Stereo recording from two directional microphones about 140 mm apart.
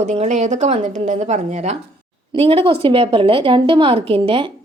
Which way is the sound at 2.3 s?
40° right (ahead or behind).